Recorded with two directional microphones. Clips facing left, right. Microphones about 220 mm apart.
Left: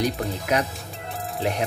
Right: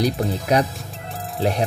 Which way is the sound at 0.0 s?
35° right (ahead or behind).